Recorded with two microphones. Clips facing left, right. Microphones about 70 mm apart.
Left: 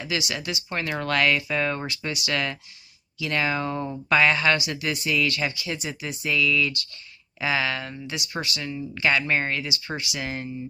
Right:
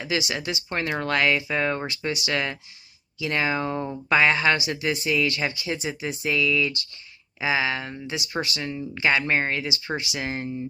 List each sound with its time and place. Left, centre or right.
0.0 s speech: right